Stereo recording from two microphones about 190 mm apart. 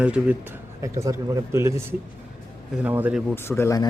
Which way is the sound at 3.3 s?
15° left (ahead or behind).